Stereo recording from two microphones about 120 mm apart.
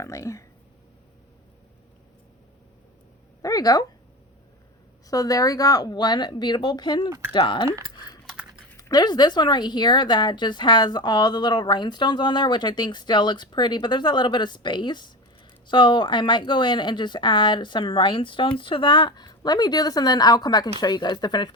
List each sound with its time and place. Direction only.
0.0 s speech: 25° left (ahead or behind)
3.4 s speech: 35° left (ahead or behind)
5.0 s speech: 30° left (ahead or behind)
8.8 s speech: 35° left (ahead or behind)